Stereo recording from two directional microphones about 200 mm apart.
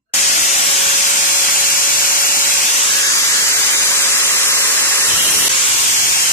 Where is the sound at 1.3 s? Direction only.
45° left (ahead or behind).